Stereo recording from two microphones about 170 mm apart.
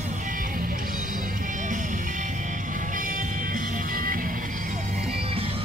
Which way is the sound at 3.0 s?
50° right (ahead or behind).